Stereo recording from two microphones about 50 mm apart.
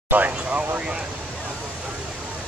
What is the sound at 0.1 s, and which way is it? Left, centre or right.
Speech, right.